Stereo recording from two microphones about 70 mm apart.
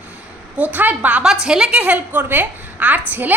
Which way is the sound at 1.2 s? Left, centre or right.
Centre.